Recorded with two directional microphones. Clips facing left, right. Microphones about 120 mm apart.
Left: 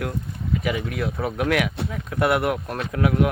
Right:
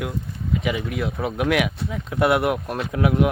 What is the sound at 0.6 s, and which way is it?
Speech, 20° right (ahead or behind).